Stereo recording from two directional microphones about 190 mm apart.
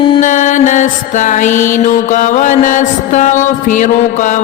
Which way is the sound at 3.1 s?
40° left (ahead or behind).